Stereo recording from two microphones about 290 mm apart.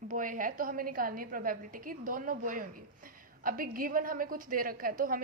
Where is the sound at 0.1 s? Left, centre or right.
Right.